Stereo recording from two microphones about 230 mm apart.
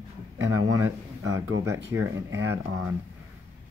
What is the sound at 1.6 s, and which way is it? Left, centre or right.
Speech, centre.